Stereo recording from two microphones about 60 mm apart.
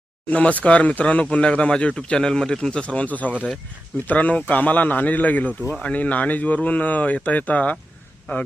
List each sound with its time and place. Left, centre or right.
0.3 s speech: left